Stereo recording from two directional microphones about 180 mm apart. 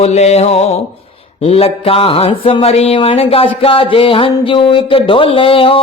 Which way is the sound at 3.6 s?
30° left (ahead or behind).